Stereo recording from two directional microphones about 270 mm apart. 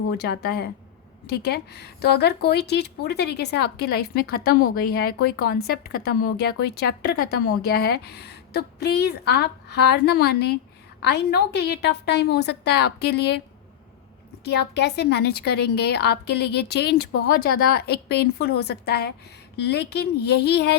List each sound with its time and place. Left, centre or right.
0.2 s speech: left
14.4 s speech: left